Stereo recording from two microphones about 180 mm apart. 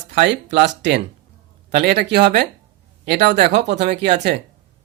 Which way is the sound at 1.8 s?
60° right (ahead or behind).